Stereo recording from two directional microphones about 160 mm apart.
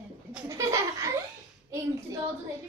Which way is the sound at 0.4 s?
20° right (ahead or behind).